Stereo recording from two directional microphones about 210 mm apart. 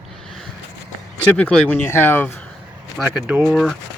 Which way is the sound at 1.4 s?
5° left (ahead or behind).